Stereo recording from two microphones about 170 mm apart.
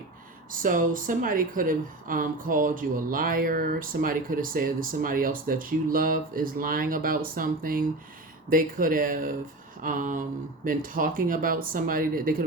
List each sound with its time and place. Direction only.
0.5 s speech: 50° right (ahead or behind)